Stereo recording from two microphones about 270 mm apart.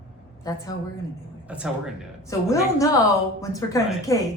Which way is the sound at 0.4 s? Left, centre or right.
Centre.